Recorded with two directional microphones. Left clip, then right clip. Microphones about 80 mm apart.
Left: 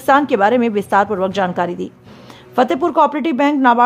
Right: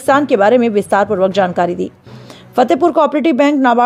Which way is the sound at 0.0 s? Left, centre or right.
Right.